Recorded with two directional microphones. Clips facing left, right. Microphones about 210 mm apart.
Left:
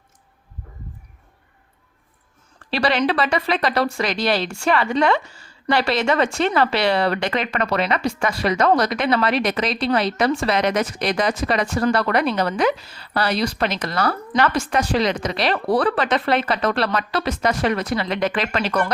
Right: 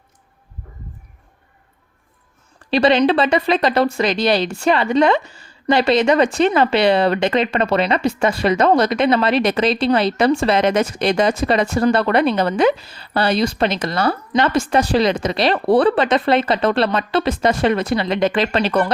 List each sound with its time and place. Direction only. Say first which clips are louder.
2.6 s a woman's voice: right 6 dB; 20° right (ahead or behind)